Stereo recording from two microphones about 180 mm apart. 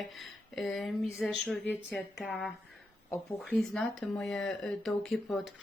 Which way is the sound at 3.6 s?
Centre (ahead or behind).